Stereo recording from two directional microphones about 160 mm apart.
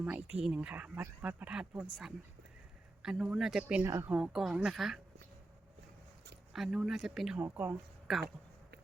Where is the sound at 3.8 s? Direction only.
15° right (ahead or behind).